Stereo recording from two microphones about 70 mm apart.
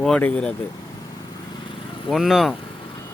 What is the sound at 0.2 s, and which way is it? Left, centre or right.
Speech, centre.